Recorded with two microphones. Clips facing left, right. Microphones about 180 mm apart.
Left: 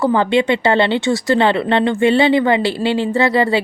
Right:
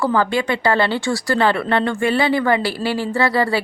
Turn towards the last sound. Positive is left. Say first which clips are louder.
# left 3 dB
turn(degrees=20)  # may be behind; listen again after turning